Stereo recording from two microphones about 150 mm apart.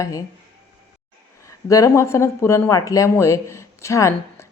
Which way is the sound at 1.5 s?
20° left (ahead or behind).